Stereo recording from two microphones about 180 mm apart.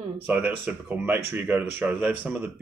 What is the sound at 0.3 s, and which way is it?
Speech, 10° right (ahead or behind).